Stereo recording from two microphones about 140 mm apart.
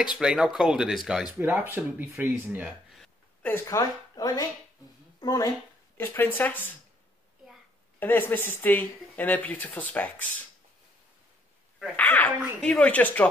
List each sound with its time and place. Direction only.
0.2 s speech: 5° right (ahead or behind)
2.6 s a sound: centre (ahead or behind)
3.4 s a woman's voice: 20° left (ahead or behind)
5.9 s speech: 15° left (ahead or behind)
8.0 s speech: 15° left (ahead or behind)
12.0 s speech: 10° left (ahead or behind)